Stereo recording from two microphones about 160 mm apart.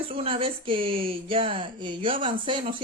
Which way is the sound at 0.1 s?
35° right (ahead or behind).